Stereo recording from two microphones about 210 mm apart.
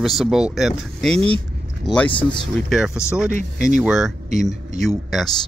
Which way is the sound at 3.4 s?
40° right (ahead or behind).